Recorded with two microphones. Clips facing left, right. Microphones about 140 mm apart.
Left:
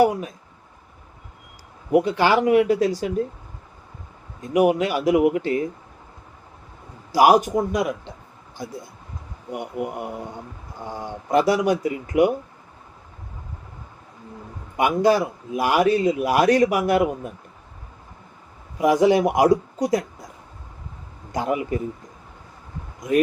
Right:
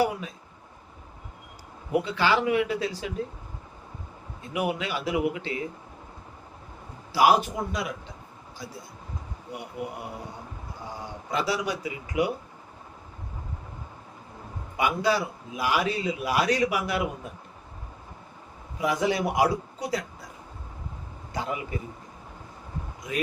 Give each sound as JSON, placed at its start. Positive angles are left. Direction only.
{"t": 1.9, "sound": "a man's voice", "side_deg": 50}
{"t": 4.5, "sound": "a man's voice", "side_deg": 45}
{"t": 7.1, "sound": "a man's voice", "side_deg": 45}
{"t": 11.3, "sound": "a man's voice", "side_deg": 50}
{"t": 14.8, "sound": "a man's voice", "side_deg": 50}
{"t": 18.8, "sound": "a man's voice", "side_deg": 50}
{"t": 21.3, "sound": "a man's voice", "side_deg": 50}